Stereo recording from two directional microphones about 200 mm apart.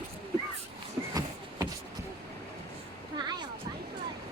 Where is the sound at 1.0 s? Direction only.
15° right (ahead or behind).